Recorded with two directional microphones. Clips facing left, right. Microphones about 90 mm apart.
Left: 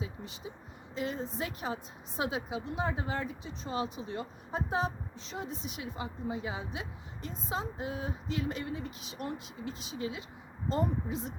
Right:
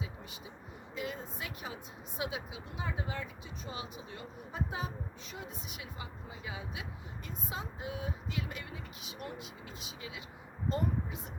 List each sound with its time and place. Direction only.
0.9 s a woman's voice: 30° left (ahead or behind)